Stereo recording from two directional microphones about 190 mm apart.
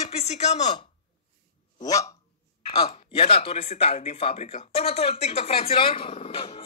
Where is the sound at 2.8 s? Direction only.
30° left (ahead or behind).